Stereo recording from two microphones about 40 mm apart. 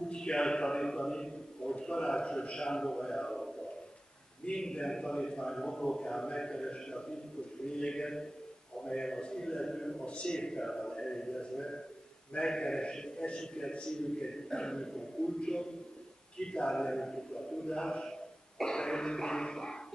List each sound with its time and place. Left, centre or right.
0.1 s a man's voice: left
4.5 s a man's voice: centre